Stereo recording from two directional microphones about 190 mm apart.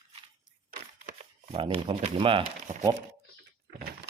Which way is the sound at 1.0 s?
35° right (ahead or behind).